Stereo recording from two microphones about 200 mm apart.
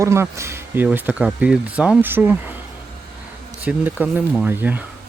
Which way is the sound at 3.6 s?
5° right (ahead or behind).